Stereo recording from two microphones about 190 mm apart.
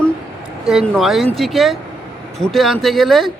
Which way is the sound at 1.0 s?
Centre (ahead or behind).